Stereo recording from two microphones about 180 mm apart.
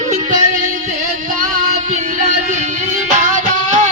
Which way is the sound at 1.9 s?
45° right (ahead or behind).